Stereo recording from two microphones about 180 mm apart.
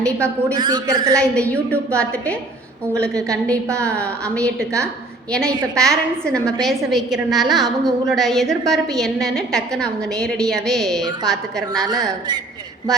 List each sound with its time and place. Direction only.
0.0 s a woman's voice: 5° left (ahead or behind)
0.5 s a man's voice: 20° right (ahead or behind)
1.1 s a woman's voice: 5° left (ahead or behind)
5.7 s a woman's voice: 5° left (ahead or behind)